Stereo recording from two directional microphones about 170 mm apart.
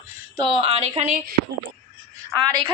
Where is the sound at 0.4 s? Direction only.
30° right (ahead or behind).